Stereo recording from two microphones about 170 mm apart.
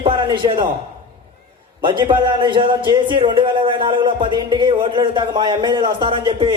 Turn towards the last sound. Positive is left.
turn(degrees=-30)  # may be behind; listen again after turning